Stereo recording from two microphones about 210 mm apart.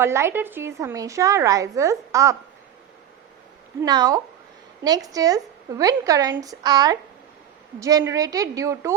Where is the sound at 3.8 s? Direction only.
15° right (ahead or behind).